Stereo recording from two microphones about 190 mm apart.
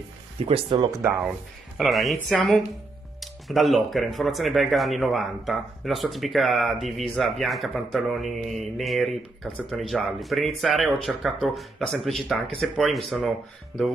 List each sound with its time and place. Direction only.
0.5 s speech: 25° right (ahead or behind)
1.8 s speech: centre (ahead or behind)